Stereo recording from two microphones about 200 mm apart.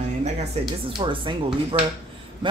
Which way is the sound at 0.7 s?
25° right (ahead or behind).